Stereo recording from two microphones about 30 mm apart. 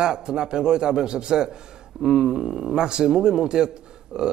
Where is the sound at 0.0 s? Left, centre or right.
Right.